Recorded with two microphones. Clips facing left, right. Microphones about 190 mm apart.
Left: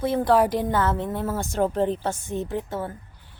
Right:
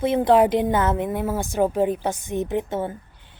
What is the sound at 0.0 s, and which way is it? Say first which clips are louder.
A woman's voice: right 3 dB; 20° right (ahead or behind).